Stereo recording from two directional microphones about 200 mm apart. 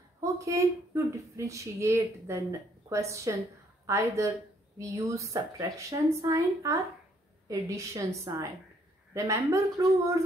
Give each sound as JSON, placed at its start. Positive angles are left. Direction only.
{"t": 0.2, "sound": "speech", "side_deg": -15}